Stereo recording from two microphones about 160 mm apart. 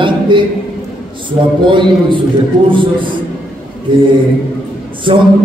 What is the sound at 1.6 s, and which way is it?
A man's voice, 30° right (ahead or behind).